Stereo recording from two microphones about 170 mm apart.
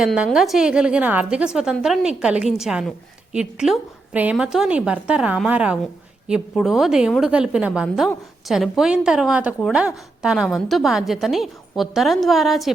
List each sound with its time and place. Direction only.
0.0 s a woman's voice: centre (ahead or behind)